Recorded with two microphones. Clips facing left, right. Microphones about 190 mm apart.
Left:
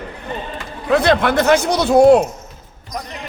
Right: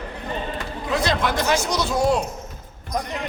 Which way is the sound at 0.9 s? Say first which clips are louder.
Left 8 dB; 60° left (ahead or behind).